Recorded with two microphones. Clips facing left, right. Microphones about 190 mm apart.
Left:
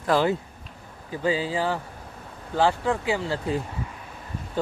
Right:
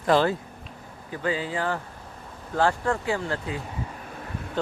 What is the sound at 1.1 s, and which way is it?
Speech, 15° left (ahead or behind).